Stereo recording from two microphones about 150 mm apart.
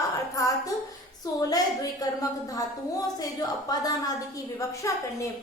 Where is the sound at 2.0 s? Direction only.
25° left (ahead or behind).